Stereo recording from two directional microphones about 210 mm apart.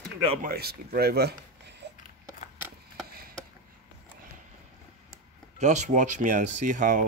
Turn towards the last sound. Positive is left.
turn(degrees=-40)  # may be behind; listen again after turning